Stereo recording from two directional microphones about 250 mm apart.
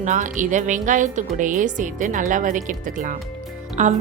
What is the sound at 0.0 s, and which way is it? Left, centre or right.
A woman's voice, right.